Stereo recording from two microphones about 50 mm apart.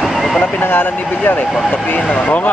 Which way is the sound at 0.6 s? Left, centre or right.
Left.